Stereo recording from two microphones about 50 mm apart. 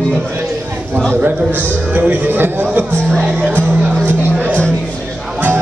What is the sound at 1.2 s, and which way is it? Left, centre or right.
A man's voice, right.